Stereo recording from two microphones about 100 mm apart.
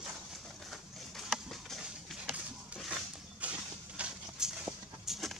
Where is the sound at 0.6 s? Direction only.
Centre (ahead or behind).